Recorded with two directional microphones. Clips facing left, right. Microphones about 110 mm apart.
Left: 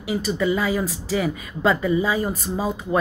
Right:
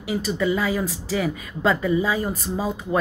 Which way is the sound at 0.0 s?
5° left (ahead or behind).